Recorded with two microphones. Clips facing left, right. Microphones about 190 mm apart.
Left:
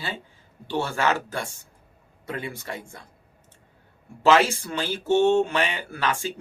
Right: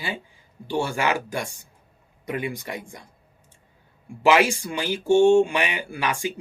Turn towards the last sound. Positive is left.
turn(degrees=-15)  # may be behind; listen again after turning